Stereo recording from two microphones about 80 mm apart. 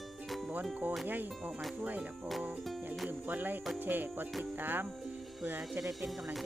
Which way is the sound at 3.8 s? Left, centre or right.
Right.